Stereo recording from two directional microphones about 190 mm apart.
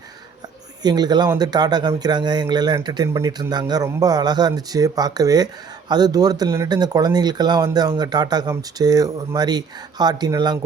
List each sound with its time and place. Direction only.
0.8 s speech: 20° right (ahead or behind)